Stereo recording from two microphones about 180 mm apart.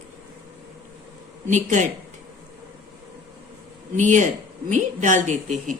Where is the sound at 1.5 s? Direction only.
40° right (ahead or behind).